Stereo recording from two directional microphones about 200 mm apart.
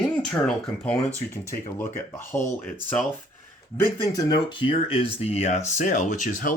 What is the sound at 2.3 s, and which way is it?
Speech, 15° left (ahead or behind).